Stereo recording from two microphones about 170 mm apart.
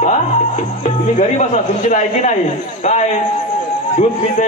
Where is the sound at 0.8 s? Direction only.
40° left (ahead or behind).